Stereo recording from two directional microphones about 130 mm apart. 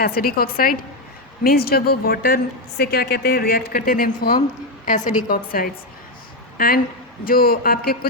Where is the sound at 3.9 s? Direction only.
90° left.